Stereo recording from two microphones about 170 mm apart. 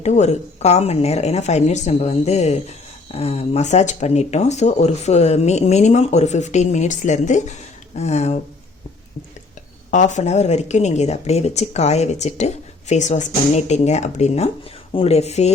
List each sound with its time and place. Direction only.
0.0 s speech: 40° left (ahead or behind)
9.9 s speech: 45° left (ahead or behind)